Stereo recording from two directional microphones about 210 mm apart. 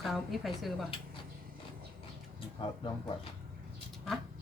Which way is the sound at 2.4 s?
25° left (ahead or behind).